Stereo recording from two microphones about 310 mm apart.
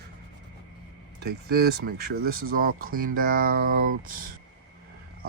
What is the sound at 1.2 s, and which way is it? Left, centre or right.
Speech, right.